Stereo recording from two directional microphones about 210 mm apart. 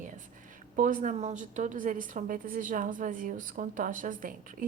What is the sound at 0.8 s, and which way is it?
A woman's voice, 40° right (ahead or behind).